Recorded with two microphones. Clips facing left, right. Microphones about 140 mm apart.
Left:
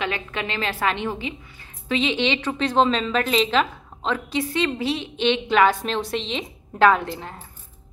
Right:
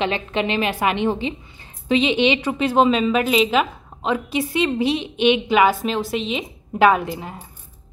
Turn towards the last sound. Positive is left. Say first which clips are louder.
# right 3 dB
turn(degrees=-10)  # may be behind; listen again after turning